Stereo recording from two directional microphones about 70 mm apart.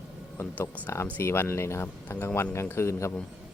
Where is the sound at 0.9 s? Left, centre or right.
Left.